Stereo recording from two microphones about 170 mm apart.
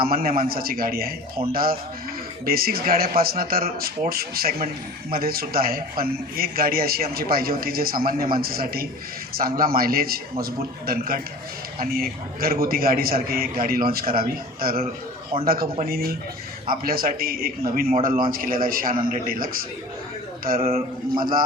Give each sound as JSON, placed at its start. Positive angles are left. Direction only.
{"t": 0.0, "sound": "a man's voice", "side_deg": -60}
{"t": 15.6, "sound": "a man's voice", "side_deg": -35}
{"t": 15.9, "sound": "a man's voice", "side_deg": -65}
{"t": 21.2, "sound": "a man's voice", "side_deg": -55}